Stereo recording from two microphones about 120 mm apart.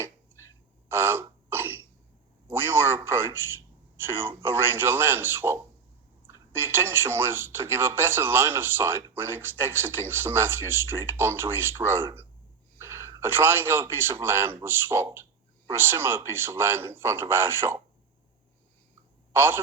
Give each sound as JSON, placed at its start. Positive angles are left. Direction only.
{"t": 0.9, "sound": "throat clearing", "side_deg": -20}
{"t": 2.5, "sound": "a man's voice", "side_deg": -20}
{"t": 19.3, "sound": "a man's voice", "side_deg": -20}